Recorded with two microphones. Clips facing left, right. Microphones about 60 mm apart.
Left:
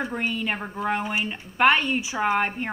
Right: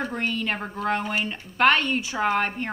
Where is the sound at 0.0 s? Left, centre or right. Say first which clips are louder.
Even; centre.